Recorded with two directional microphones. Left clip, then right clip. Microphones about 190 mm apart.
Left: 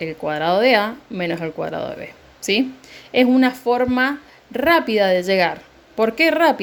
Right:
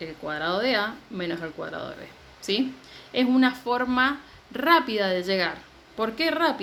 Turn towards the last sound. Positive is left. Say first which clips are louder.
# left 9 dB
turn(degrees=35)  # may be behind; listen again after turning